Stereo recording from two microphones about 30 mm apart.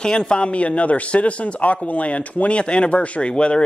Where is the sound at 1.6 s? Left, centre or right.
Left.